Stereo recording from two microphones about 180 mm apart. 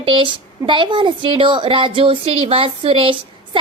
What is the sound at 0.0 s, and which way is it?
A woman's voice, 30° right (ahead or behind).